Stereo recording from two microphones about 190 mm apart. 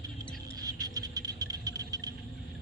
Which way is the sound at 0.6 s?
20° right (ahead or behind).